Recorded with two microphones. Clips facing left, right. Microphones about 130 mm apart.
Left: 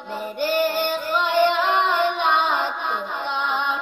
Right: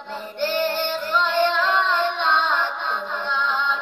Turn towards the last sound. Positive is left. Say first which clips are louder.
# even
turn(degrees=15)  # may be behind; listen again after turning